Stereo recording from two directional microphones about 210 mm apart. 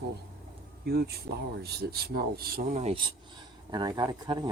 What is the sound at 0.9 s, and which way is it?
Speech, 50° right (ahead or behind).